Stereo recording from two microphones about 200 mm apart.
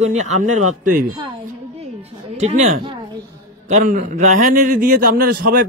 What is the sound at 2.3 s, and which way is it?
A man's voice, 35° right (ahead or behind).